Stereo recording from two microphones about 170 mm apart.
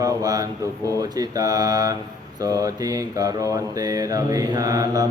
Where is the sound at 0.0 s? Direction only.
20° right (ahead or behind).